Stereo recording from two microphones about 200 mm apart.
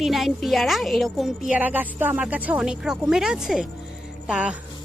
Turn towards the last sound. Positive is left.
turn(degrees=-5)  # may be behind; listen again after turning